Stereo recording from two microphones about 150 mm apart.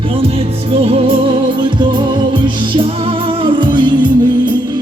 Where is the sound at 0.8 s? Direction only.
40° right (ahead or behind).